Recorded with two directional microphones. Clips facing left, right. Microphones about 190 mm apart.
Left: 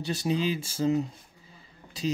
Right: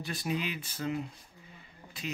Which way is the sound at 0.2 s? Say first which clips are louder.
Left 7 dB; 30° left (ahead or behind).